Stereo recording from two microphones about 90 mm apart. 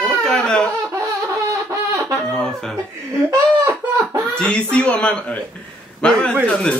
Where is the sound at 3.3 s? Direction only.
35° right (ahead or behind).